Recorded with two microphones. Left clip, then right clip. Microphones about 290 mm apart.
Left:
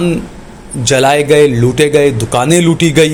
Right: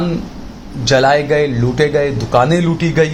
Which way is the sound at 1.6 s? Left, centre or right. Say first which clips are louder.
Left 5 dB; left.